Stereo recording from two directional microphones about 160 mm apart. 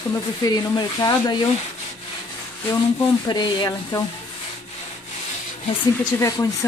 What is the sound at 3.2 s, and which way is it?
Rub, 25° left (ahead or behind).